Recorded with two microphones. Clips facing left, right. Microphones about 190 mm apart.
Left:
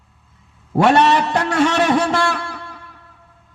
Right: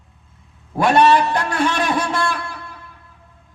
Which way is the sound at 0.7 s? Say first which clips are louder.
Even; 75° left (ahead or behind).